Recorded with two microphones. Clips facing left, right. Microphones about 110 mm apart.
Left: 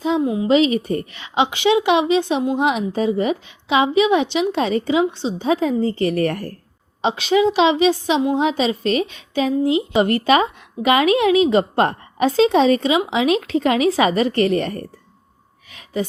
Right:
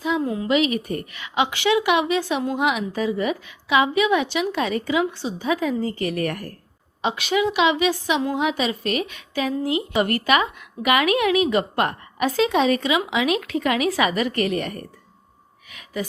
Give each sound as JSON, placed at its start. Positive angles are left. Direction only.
{"t": 0.2, "sound": "a woman's voice", "side_deg": 15}
{"t": 0.4, "sound": "a woman's voice", "side_deg": 30}
{"t": 15.7, "sound": "a sound", "side_deg": 30}